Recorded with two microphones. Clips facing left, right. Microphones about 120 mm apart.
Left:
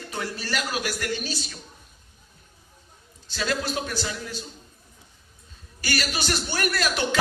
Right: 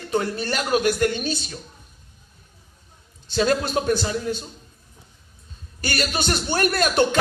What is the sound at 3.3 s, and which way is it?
Speech, 45° right (ahead or behind).